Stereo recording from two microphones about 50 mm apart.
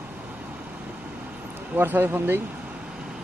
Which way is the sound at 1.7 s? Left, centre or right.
Right.